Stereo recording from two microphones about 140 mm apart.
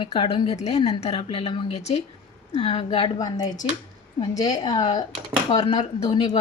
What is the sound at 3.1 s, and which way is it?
Speech, 30° left (ahead or behind).